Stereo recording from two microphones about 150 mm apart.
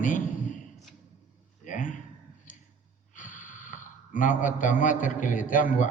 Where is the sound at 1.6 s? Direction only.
60° left (ahead or behind).